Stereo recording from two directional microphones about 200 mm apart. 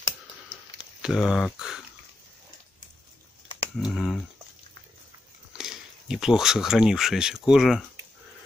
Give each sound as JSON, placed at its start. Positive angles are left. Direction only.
{"t": 1.0, "sound": "speech", "side_deg": 0}
{"t": 3.4, "sound": "typing", "side_deg": 25}
{"t": 3.9, "sound": "speech", "side_deg": 0}
{"t": 5.6, "sound": "speech", "side_deg": 0}